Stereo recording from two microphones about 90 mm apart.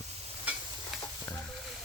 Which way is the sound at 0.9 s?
Centre (ahead or behind).